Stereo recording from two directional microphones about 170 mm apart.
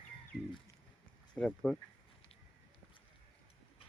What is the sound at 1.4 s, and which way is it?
Speech, 5° left (ahead or behind).